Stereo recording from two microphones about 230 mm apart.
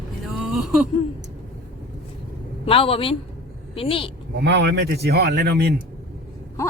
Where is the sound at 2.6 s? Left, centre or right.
Left.